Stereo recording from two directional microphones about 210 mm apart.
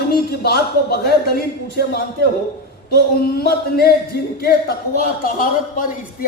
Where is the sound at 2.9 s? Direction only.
45° left (ahead or behind).